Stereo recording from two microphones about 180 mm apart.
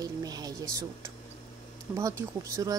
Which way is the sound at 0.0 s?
20° right (ahead or behind).